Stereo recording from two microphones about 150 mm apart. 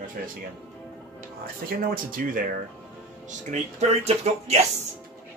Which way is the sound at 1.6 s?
70° right (ahead or behind).